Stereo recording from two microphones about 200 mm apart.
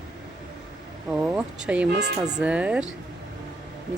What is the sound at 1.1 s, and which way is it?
Speech, 5° right (ahead or behind).